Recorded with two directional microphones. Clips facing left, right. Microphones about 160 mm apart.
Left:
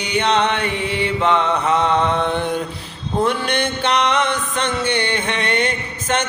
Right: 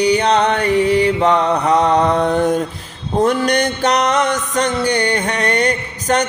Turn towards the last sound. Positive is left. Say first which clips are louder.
# right 4 dB
turn(degrees=-40)  # may be behind; listen again after turning